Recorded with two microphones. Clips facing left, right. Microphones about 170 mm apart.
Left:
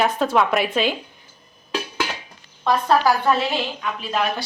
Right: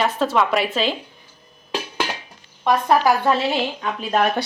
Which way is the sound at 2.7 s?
20° right (ahead or behind).